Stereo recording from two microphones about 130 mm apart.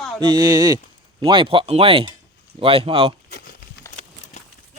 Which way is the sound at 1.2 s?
40° right (ahead or behind).